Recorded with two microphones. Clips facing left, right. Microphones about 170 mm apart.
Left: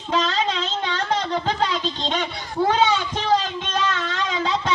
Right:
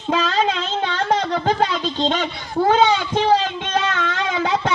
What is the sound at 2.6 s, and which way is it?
Speech, 50° right (ahead or behind).